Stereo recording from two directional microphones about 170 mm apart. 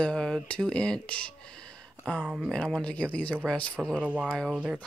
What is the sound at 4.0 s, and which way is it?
Speech, 10° right (ahead or behind).